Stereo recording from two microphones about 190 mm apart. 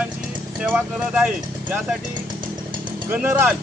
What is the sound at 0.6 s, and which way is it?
Speech, 5° right (ahead or behind).